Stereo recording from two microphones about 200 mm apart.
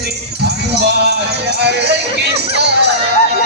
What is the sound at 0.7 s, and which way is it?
Music, 55° right (ahead or behind).